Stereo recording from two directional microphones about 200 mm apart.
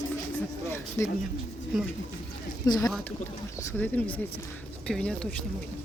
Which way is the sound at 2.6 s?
20° left (ahead or behind).